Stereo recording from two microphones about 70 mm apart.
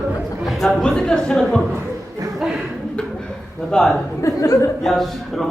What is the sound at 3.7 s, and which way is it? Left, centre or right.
Speech, centre.